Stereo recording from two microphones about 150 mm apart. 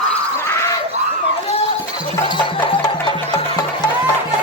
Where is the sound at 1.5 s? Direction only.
45° left (ahead or behind).